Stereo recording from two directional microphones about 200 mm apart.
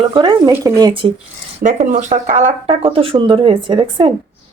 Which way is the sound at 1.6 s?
35° right (ahead or behind).